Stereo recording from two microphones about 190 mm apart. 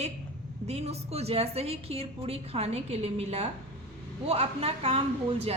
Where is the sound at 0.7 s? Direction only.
35° right (ahead or behind).